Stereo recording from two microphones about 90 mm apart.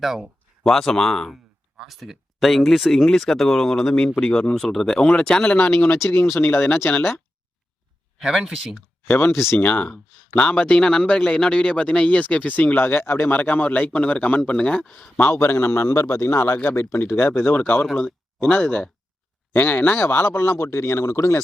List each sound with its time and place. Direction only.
0.0 s speech: 5° right (ahead or behind)
6.0 s speech: 25° left (ahead or behind)
8.2 s speech: 5° right (ahead or behind)
9.0 s a man's voice: 25° left (ahead or behind)
15.2 s speech: 25° left (ahead or behind)